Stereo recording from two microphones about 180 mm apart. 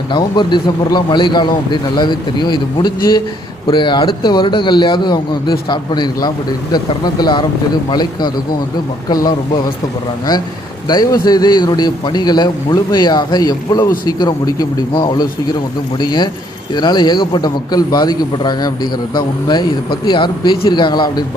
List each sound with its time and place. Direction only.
0.1 s a man's voice: 25° left (ahead or behind)
10.8 s a man's voice: 20° left (ahead or behind)